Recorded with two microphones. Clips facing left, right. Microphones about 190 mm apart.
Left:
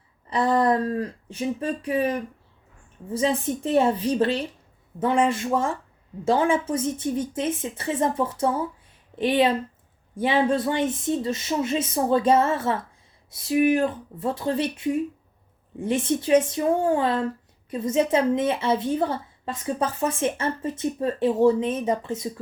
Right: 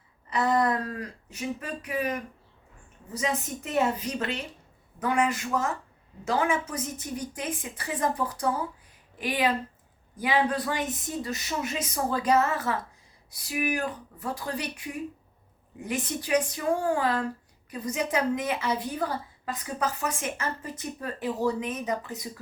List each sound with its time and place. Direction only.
0.3 s a woman's voice: 30° left (ahead or behind)